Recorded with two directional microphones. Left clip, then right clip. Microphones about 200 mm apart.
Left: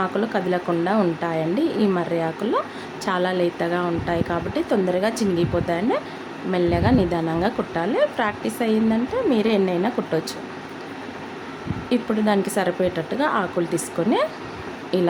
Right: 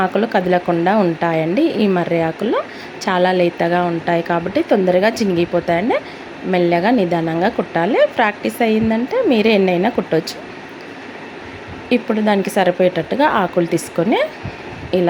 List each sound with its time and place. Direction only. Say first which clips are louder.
0.0 s speech: right 7 dB; 15° right (ahead or behind)
11.9 s speech: right 5 dB; 15° right (ahead or behind)